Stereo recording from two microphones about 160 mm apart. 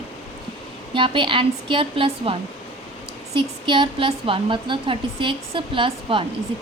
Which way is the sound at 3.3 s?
30° right (ahead or behind).